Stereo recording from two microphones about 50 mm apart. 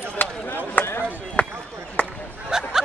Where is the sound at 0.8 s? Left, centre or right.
Left.